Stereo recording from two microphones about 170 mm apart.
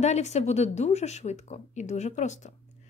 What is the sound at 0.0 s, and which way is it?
Speech, 40° left (ahead or behind).